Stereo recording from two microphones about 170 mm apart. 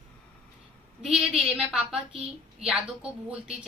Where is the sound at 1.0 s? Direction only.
5° right (ahead or behind).